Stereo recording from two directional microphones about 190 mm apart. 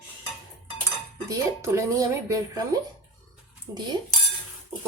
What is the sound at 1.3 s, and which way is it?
Speech, 15° right (ahead or behind).